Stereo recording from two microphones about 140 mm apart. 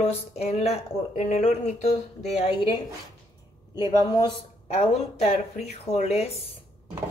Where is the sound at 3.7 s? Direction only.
30° left (ahead or behind).